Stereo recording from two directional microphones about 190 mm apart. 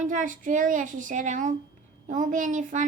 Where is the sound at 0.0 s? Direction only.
40° right (ahead or behind).